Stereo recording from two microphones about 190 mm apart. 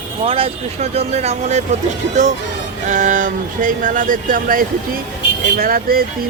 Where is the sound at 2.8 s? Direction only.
40° right (ahead or behind).